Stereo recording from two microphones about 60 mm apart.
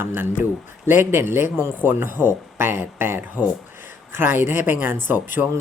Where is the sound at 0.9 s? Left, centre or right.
Right.